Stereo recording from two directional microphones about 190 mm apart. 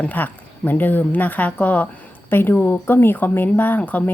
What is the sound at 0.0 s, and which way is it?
Speech, 10° left (ahead or behind).